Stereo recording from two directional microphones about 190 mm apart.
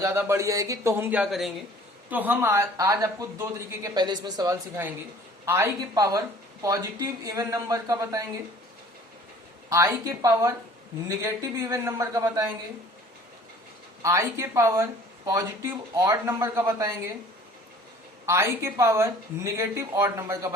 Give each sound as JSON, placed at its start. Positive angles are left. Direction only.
{"t": 0.0, "sound": "speech", "side_deg": -15}
{"t": 9.6, "sound": "speech", "side_deg": -15}
{"t": 14.0, "sound": "speech", "side_deg": -15}
{"t": 18.3, "sound": "speech", "side_deg": -15}